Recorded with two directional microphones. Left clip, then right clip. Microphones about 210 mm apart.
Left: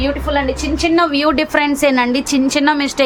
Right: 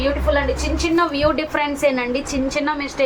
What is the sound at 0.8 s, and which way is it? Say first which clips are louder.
A woman's voice: left 4 dB; 55° left (ahead or behind).